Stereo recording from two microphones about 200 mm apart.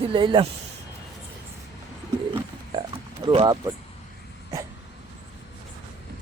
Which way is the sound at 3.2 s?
25° right (ahead or behind).